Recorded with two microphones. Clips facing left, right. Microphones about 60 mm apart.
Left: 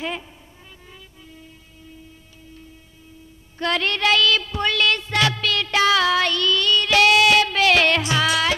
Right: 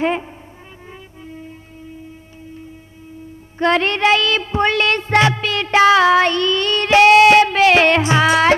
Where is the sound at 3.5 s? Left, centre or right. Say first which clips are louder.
Right 7 dB; right.